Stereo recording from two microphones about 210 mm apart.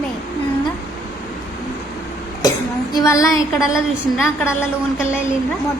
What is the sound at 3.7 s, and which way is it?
Speech, centre (ahead or behind).